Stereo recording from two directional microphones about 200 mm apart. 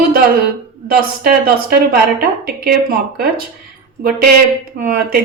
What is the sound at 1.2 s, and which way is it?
Speech, 50° right (ahead or behind).